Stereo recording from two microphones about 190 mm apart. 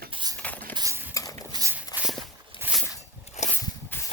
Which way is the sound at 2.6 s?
5° right (ahead or behind).